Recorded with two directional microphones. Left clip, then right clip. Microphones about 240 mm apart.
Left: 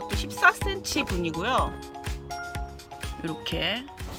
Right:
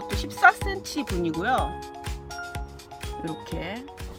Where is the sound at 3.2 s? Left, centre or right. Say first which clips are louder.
Left 5 dB; centre.